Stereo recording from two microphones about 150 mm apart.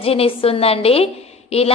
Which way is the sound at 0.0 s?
40° left (ahead or behind).